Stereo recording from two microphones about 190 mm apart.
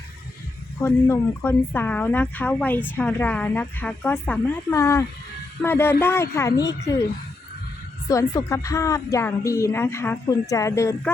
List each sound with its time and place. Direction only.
0.8 s speech: 15° left (ahead or behind)
8.0 s speech: 20° left (ahead or behind)